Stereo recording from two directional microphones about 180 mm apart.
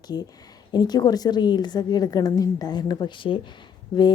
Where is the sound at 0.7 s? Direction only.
25° left (ahead or behind).